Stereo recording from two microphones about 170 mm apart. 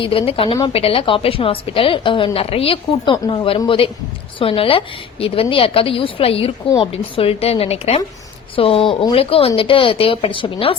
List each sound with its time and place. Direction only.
0.0 s a woman's voice: 30° left (ahead or behind)